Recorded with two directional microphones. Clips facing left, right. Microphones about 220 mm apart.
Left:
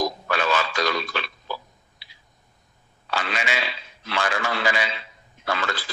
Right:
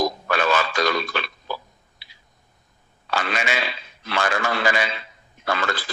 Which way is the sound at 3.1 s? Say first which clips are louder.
Right 2 dB; 50° right (ahead or behind).